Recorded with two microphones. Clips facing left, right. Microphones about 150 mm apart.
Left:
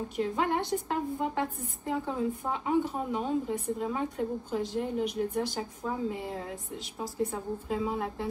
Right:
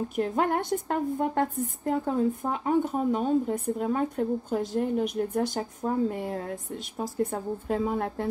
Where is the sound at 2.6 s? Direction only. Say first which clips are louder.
Right 4 dB; 45° right (ahead or behind).